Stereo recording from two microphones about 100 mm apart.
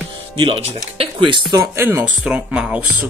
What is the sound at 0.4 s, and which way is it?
Speech, 65° right (ahead or behind).